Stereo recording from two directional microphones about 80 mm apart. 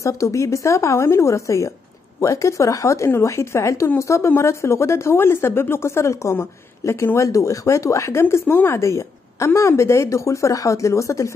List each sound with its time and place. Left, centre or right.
0.0 s speech: left